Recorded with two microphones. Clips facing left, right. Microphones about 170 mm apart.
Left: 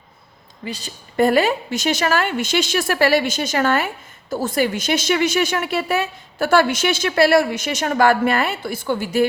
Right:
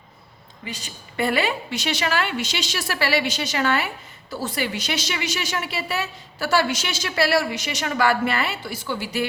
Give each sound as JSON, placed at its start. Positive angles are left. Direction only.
{"t": 0.6, "sound": "a woman's voice", "side_deg": 35}